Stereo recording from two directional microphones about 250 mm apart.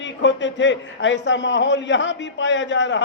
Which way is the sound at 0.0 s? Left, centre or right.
Left.